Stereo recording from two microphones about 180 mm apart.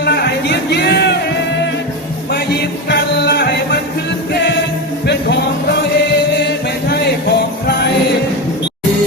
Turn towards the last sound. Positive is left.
turn(degrees=65)  # may be behind; listen again after turning